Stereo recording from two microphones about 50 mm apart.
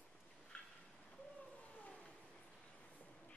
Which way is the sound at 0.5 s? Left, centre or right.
Left.